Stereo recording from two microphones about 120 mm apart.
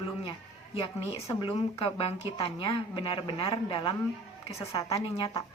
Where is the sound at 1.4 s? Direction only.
50° left (ahead or behind).